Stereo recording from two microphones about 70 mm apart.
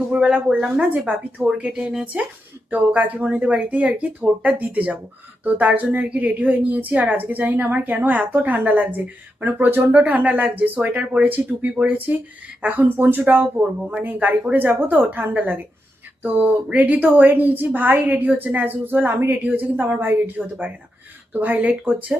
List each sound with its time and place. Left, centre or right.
0.1 s speech: right
2.6 s a woman's voice: right